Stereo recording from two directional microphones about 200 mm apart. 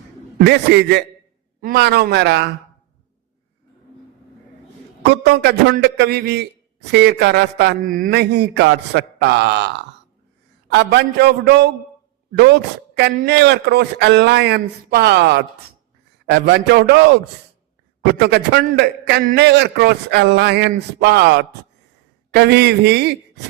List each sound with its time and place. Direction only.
0.3 s a man's voice: 55° right (ahead or behind)
5.0 s a man's voice: 55° right (ahead or behind)